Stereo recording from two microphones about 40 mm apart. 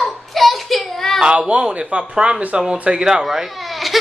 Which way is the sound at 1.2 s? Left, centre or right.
Right.